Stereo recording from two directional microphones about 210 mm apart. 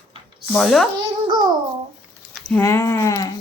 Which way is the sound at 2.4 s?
10° left (ahead or behind).